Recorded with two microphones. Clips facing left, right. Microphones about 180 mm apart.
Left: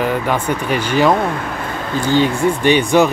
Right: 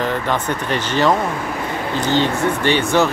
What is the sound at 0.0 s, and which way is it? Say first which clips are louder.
Speech: left 3 dB; 10° left (ahead or behind).